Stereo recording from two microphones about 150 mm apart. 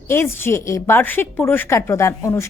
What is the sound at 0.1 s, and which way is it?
Speech, 15° left (ahead or behind).